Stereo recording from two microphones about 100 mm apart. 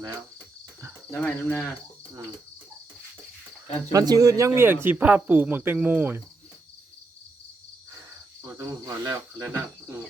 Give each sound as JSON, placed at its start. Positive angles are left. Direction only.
{"t": 1.2, "sound": "speech", "side_deg": 15}
{"t": 3.9, "sound": "speech", "side_deg": -35}
{"t": 8.4, "sound": "cricket", "side_deg": -35}